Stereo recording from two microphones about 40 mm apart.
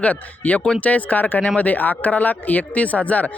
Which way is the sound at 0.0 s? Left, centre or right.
Left.